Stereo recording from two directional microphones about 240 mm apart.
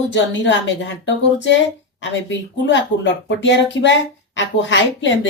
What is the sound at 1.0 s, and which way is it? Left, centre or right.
Speech, left.